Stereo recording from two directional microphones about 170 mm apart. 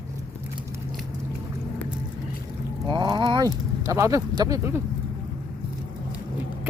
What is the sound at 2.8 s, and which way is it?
Speech, 25° right (ahead or behind).